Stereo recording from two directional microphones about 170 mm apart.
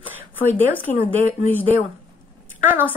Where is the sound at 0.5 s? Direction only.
10° left (ahead or behind).